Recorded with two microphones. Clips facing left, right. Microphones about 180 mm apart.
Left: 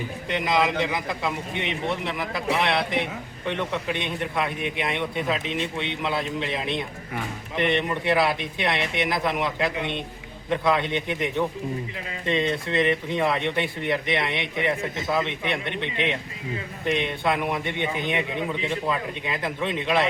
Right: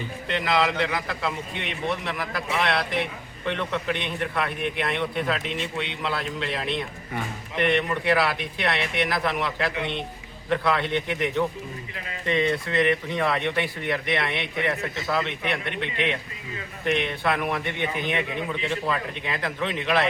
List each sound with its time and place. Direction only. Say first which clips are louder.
0.3 s a man's voice: even; 15° left (ahead or behind)